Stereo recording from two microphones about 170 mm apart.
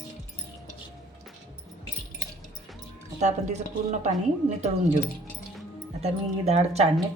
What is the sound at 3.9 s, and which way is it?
Speech, 45° right (ahead or behind).